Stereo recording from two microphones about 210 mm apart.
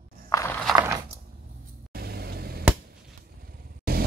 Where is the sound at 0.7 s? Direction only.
10° right (ahead or behind).